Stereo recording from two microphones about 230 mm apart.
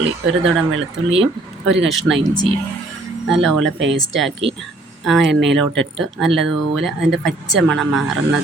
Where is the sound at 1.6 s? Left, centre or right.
Centre.